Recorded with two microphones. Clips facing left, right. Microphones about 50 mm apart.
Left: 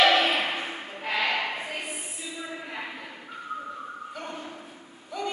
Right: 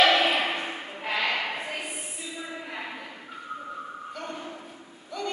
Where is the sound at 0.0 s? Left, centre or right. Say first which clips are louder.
Even; centre.